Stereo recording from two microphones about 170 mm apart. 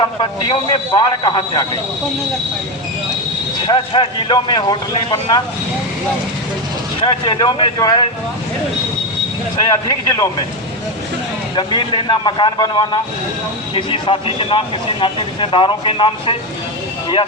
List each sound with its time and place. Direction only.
0.0 s speech: 25° left (ahead or behind)
3.7 s speech: 30° left (ahead or behind)
7.0 s speech: 25° left (ahead or behind)
9.6 s speech: 20° left (ahead or behind)
11.5 s speech: 30° left (ahead or behind)